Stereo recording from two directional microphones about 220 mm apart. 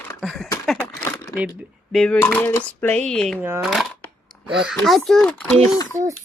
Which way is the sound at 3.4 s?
10° right (ahead or behind).